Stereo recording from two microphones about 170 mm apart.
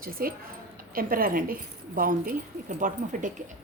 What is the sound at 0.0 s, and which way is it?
A woman's voice, 60° right (ahead or behind).